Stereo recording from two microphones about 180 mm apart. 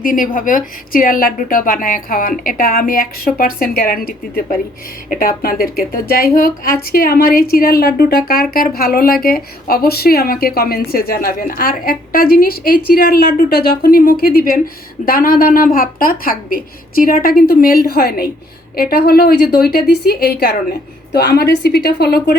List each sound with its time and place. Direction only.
0.0 s a woman's voice: 50° left (ahead or behind)